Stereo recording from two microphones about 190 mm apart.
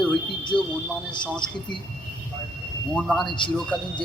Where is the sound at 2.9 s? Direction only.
Centre (ahead or behind).